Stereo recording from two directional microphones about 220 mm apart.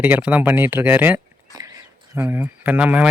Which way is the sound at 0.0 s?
5° right (ahead or behind).